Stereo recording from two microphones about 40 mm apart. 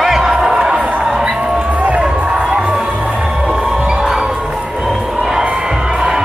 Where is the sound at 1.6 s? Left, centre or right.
Right.